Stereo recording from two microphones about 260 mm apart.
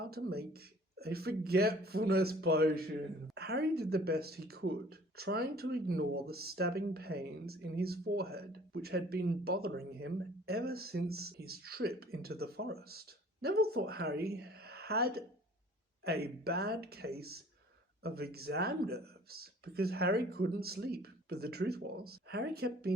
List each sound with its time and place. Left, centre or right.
0.0 s speech: right